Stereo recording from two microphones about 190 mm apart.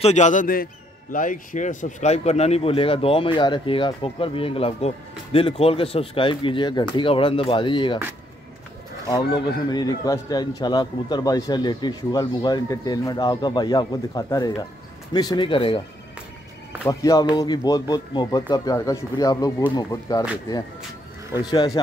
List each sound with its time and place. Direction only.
0.0 s a man's voice: 40° left (ahead or behind)
9.0 s speech: 20° left (ahead or behind)
16.8 s speech: 20° left (ahead or behind)
21.4 s speech: 20° left (ahead or behind)